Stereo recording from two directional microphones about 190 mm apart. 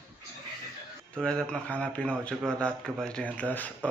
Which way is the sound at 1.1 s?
5° left (ahead or behind).